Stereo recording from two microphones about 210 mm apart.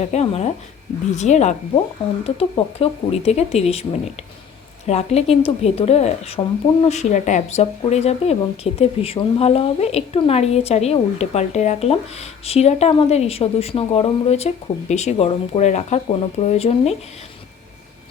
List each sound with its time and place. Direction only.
0.0 s speech: 30° left (ahead or behind)